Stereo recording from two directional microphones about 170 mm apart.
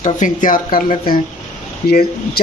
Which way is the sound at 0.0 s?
50° left (ahead or behind).